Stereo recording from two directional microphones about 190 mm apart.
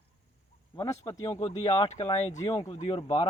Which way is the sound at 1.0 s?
20° left (ahead or behind).